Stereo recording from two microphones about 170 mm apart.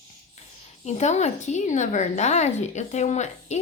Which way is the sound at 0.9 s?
40° left (ahead or behind).